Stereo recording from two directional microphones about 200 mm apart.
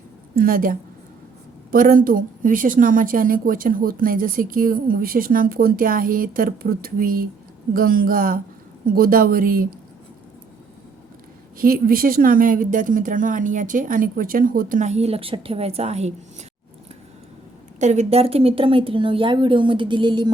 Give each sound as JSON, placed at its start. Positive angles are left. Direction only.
{"t": 0.3, "sound": "a woman's voice", "side_deg": -45}
{"t": 11.5, "sound": "speech", "side_deg": -45}
{"t": 17.7, "sound": "speech", "side_deg": -35}